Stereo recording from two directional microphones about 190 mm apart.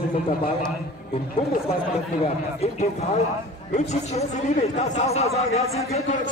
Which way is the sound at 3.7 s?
35° left (ahead or behind).